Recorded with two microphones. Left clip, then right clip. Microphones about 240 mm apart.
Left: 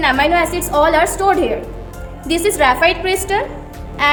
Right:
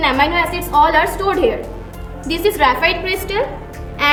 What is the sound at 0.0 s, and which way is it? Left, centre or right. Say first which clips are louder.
A woman's voice: left 1 dB; left.